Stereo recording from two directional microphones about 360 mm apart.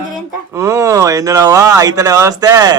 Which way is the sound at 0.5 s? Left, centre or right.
Centre.